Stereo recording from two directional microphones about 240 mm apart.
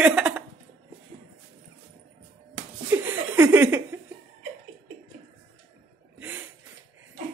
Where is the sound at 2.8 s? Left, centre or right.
Centre.